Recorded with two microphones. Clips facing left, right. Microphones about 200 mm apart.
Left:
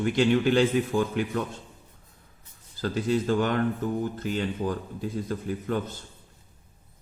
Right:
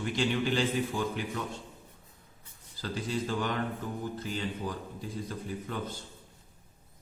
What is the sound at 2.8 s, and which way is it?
Speech, 50° left (ahead or behind).